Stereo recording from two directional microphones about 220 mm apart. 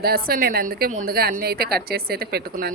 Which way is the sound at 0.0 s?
45° right (ahead or behind).